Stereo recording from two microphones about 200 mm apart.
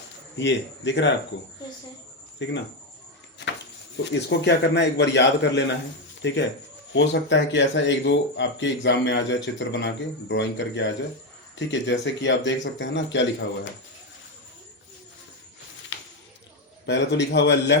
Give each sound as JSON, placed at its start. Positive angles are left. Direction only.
{"t": 0.3, "sound": "speech", "side_deg": 65}
{"t": 2.4, "sound": "speech", "side_deg": 60}
{"t": 3.9, "sound": "speech", "side_deg": 65}
{"t": 15.9, "sound": "a sound", "side_deg": 70}
{"t": 16.8, "sound": "speech", "side_deg": 60}